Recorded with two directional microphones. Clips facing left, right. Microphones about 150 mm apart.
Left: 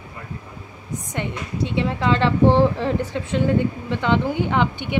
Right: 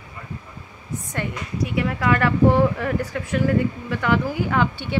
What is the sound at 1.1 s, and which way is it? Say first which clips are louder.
A woman's voice: left 1 dB; 25° left (ahead or behind).